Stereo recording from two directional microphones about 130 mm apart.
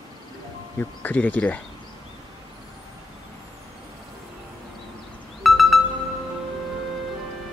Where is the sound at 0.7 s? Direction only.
15° left (ahead or behind).